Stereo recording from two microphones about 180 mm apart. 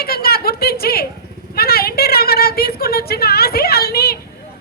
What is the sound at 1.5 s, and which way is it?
A woman's voice, 60° left (ahead or behind).